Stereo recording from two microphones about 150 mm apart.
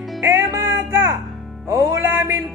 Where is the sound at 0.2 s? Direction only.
20° right (ahead or behind).